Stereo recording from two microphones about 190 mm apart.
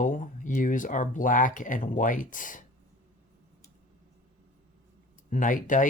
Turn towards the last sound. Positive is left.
turn(degrees=45)  # may be behind; listen again after turning